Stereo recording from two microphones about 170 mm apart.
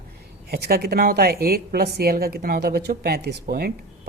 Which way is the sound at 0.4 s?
65° right (ahead or behind).